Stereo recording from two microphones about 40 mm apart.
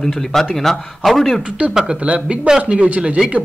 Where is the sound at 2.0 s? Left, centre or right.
Right.